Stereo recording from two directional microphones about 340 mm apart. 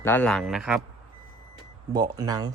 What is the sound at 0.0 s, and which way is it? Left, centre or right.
Speech, centre.